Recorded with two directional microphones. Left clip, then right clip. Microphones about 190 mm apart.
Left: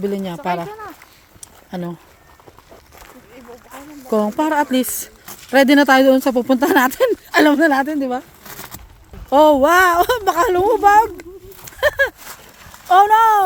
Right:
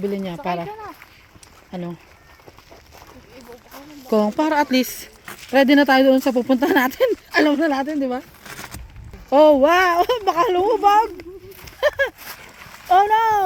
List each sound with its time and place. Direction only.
0.0 s speech: 15° left (ahead or behind)
1.7 s speech: 25° left (ahead or behind)
4.1 s speech: centre (ahead or behind); by 7.9 s 20° left (ahead or behind)
7.9 s speech: 5° left (ahead or behind)